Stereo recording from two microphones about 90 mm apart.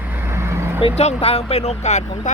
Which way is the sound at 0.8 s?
90° left.